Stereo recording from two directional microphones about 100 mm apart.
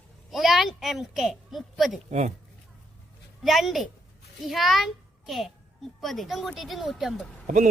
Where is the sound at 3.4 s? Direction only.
Centre (ahead or behind).